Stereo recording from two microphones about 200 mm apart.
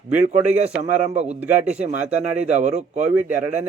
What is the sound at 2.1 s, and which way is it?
Speech, 35° right (ahead or behind).